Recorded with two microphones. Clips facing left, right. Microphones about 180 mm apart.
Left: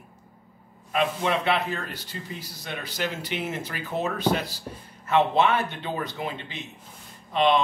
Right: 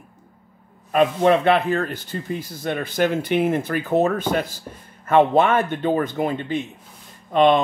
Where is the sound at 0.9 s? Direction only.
50° right (ahead or behind).